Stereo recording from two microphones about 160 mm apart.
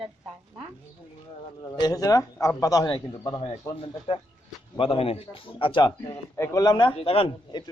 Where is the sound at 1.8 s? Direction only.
20° left (ahead or behind).